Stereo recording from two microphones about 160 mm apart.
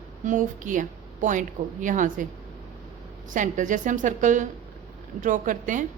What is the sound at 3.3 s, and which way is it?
A woman's voice, 50° right (ahead or behind).